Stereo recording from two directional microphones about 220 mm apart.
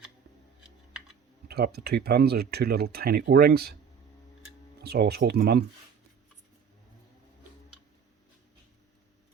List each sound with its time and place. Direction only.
1.5 s speech: 45° right (ahead or behind)
4.8 s speech: 45° right (ahead or behind)